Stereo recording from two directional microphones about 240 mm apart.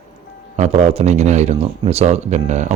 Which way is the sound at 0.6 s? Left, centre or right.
Right.